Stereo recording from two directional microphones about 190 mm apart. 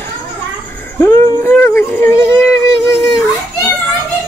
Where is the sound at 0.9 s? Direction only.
15° left (ahead or behind).